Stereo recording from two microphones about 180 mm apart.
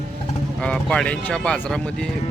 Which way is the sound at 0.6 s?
5° left (ahead or behind).